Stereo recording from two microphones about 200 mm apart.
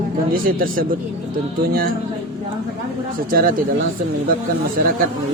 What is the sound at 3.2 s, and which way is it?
Speech, 45° right (ahead or behind).